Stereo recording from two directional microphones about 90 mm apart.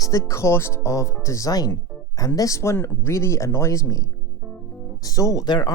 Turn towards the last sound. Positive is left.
turn(degrees=50)  # may be behind; listen again after turning